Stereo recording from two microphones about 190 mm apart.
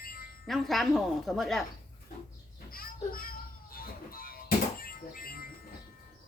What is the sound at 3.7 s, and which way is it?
Music, 50° left (ahead or behind).